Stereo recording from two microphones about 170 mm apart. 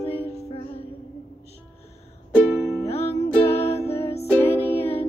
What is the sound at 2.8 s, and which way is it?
Music, 40° left (ahead or behind).